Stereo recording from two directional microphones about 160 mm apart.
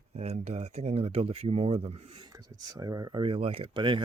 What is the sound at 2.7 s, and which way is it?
Speech, 20° right (ahead or behind).